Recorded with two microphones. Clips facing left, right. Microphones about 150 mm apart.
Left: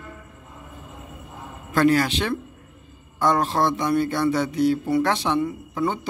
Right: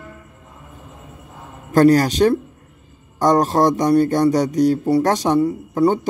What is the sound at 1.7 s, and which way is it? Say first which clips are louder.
A man's voice: right 6 dB; 40° right (ahead or behind).